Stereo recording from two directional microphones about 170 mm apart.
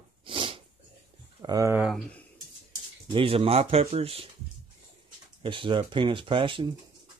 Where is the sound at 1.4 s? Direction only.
20° right (ahead or behind).